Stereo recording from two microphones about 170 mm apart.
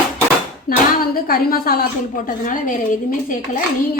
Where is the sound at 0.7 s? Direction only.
60° left (ahead or behind).